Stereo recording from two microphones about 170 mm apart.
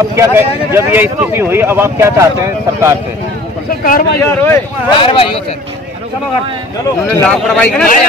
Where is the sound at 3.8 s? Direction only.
60° left (ahead or behind).